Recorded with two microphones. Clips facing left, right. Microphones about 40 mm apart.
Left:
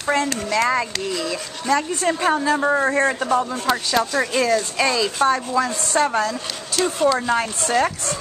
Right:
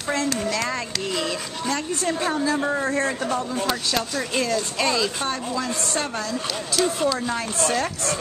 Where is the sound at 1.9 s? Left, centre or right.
Left.